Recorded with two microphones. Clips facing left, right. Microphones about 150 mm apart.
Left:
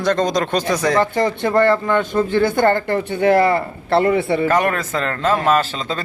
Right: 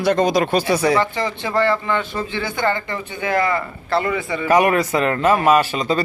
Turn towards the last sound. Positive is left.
turn(degrees=-10)  # may be behind; listen again after turning